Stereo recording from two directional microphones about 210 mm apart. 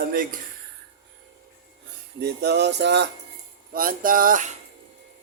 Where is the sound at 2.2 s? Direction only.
50° right (ahead or behind).